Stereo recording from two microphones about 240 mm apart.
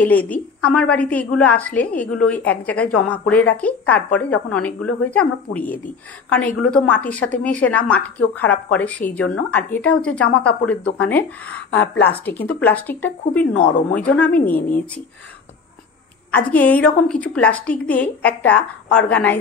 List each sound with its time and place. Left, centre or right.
0.0 s a woman's voice: centre
11.7 s a woman's voice: left
12.0 s a woman's voice: centre
13.6 s a woman's voice: left
13.9 s a woman's voice: centre
16.4 s a woman's voice: centre